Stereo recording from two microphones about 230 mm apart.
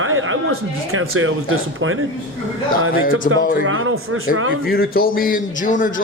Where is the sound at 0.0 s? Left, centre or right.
Right.